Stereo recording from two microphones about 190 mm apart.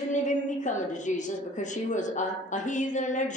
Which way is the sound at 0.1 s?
40° left (ahead or behind).